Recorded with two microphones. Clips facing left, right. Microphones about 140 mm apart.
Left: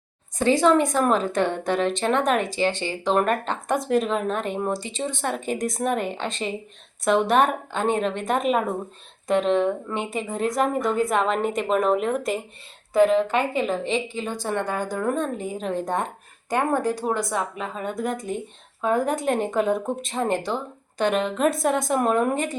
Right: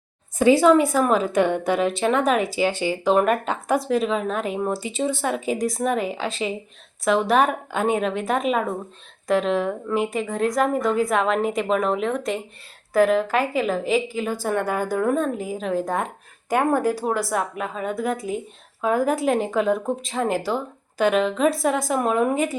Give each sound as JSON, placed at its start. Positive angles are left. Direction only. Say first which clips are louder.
{"t": 0.3, "sound": "a woman's voice", "louder": "right 3 dB", "side_deg": -10}